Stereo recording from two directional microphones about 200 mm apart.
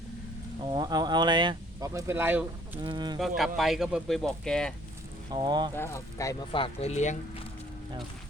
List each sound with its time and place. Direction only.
0.6 s speech: 20° right (ahead or behind)
2.8 s speech: 25° right (ahead or behind)
3.2 s speech: centre (ahead or behind)
5.3 s speech: 20° right (ahead or behind)
5.7 s speech: 15° left (ahead or behind)
6.5 s speech: 25° left (ahead or behind)